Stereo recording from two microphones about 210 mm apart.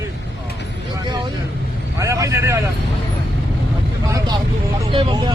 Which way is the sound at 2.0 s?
15° right (ahead or behind).